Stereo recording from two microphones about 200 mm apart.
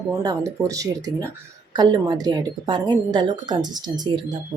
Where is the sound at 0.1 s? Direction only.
15° right (ahead or behind).